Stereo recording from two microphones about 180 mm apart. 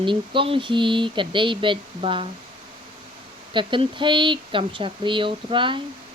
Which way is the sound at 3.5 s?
25° right (ahead or behind).